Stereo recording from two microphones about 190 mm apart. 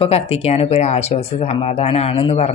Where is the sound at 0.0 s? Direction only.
35° left (ahead or behind).